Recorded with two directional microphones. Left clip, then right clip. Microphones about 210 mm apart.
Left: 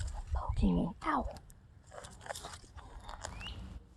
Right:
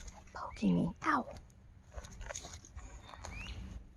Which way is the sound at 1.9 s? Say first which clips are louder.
Left 3 dB; 30° left (ahead or behind).